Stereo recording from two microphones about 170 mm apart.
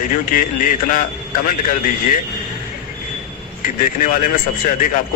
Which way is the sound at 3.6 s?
50° left (ahead or behind).